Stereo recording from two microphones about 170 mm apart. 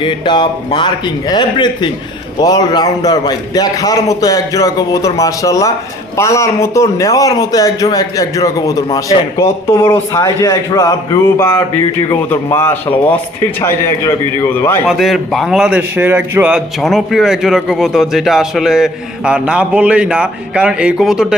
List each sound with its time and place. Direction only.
0.0 s a man's voice: 30° left (ahead or behind)
14.8 s a man's voice: centre (ahead or behind)